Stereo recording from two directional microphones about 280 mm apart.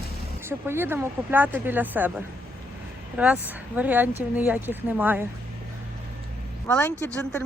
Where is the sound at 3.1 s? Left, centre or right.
Centre.